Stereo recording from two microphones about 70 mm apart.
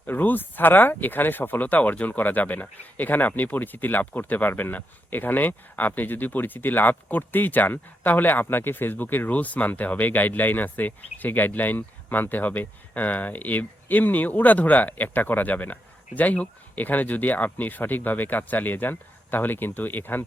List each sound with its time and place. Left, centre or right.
0.0 s speech: left